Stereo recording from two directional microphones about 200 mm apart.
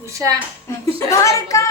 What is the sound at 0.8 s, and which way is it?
Speech, 15° left (ahead or behind).